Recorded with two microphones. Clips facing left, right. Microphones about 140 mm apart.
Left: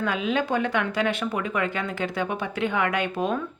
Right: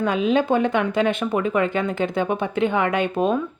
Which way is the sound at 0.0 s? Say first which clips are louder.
Right 6 dB; 20° right (ahead or behind).